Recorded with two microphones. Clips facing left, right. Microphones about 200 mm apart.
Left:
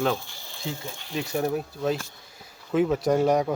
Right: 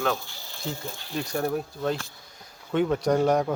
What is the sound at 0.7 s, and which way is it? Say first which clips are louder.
A man's voice: even; 10° left (ahead or behind).